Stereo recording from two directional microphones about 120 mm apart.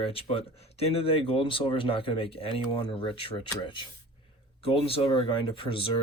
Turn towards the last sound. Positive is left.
turn(degrees=45)  # may be behind; listen again after turning